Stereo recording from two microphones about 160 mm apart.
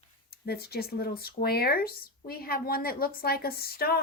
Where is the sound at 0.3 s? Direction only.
75° left (ahead or behind).